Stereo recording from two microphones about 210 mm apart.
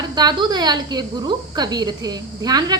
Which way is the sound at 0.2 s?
20° right (ahead or behind).